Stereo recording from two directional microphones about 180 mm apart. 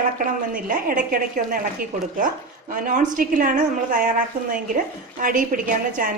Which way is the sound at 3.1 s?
50° right (ahead or behind).